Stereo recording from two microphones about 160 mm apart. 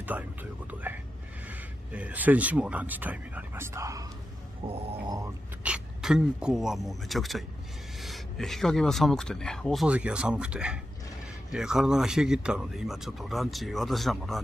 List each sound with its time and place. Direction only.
0.0 s speech: 10° right (ahead or behind)
4.6 s a sound: 35° right (ahead or behind)
5.6 s speech: 5° right (ahead or behind)
9.8 s speech: 5° right (ahead or behind)